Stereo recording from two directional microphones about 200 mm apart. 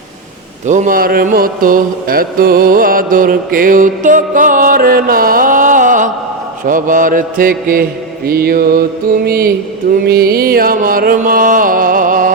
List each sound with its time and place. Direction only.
0.7 s mantra: 40° right (ahead or behind)